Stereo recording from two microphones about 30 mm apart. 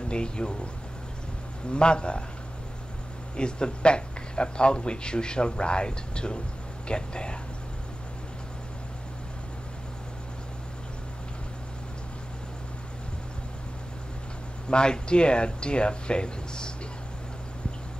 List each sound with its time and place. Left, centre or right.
0.1 s speech: left
1.7 s speech: left
3.3 s speech: left
14.7 s speech: left